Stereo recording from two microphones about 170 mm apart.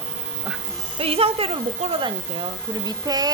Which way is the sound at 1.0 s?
35° right (ahead or behind).